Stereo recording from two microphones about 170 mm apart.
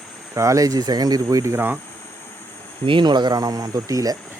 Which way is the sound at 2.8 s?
30° right (ahead or behind).